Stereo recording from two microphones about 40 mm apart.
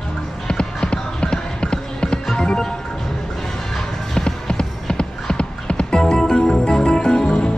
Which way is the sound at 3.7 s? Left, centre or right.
Centre.